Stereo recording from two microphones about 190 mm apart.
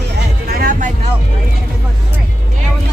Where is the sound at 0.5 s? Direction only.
50° right (ahead or behind).